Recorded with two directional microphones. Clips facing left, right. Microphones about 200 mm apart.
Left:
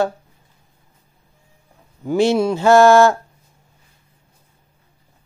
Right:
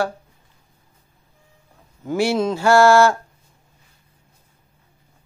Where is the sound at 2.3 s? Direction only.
15° left (ahead or behind).